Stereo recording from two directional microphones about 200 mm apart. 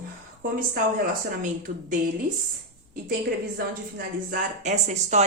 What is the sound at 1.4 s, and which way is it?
Speech, 40° right (ahead or behind).